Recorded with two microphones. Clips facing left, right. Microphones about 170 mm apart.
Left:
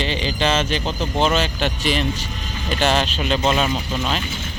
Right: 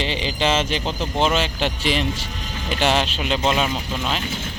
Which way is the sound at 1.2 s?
20° right (ahead or behind).